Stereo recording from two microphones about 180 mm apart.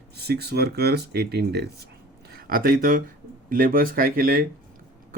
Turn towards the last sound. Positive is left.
turn(degrees=-55)  # may be behind; listen again after turning